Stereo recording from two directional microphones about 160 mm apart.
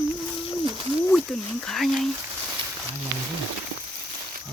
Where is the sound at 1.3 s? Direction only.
5° left (ahead or behind).